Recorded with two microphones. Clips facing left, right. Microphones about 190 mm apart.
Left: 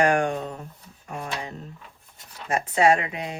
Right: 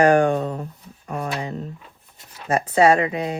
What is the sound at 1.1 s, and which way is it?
Speech, 60° right (ahead or behind).